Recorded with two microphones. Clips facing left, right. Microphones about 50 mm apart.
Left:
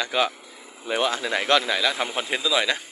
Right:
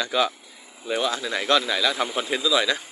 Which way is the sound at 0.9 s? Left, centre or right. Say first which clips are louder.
Left 1 dB; left.